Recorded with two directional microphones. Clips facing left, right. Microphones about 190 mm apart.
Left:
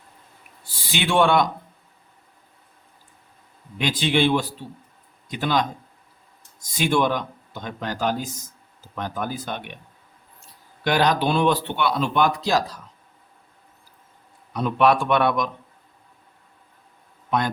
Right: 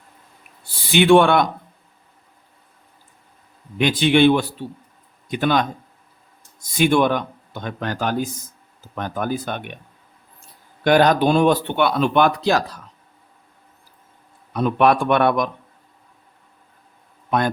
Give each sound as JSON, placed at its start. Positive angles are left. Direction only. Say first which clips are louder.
{"t": 0.9, "sound": "speech", "louder": "right 7 dB", "side_deg": -55}
{"t": 3.8, "sound": "speech", "louder": "right 6 dB", "side_deg": -60}
{"t": 10.8, "sound": "speech", "louder": "right 6 dB", "side_deg": -50}
{"t": 14.5, "sound": "speech", "louder": "right 2 dB", "side_deg": -55}